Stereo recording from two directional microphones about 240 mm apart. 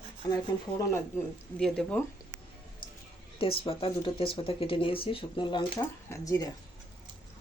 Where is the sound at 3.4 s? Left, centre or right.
Left.